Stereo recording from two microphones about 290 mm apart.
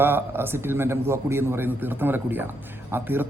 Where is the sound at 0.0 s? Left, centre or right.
Centre.